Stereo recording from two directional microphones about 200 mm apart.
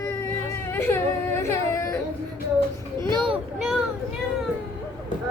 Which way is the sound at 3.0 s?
20° right (ahead or behind).